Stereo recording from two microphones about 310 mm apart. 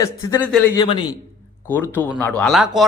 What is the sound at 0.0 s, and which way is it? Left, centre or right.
A man's voice, centre.